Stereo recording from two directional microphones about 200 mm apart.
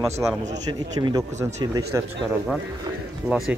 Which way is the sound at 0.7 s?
20° right (ahead or behind).